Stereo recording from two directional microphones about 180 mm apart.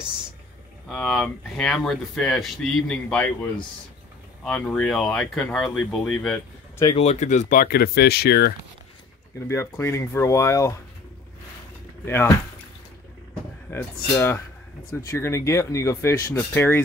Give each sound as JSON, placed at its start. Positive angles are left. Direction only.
{"t": 0.8, "sound": "speech", "side_deg": 0}
{"t": 7.0, "sound": "speech", "side_deg": 40}
{"t": 9.5, "sound": "speech", "side_deg": 15}
{"t": 12.0, "sound": "speech", "side_deg": 10}
{"t": 13.7, "sound": "speech", "side_deg": 10}